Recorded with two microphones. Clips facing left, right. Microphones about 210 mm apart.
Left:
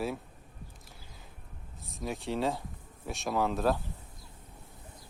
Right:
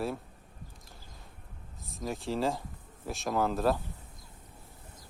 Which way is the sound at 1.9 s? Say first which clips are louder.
Even; centre (ahead or behind).